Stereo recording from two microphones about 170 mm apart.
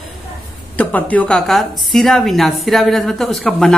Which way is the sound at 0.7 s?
10° left (ahead or behind).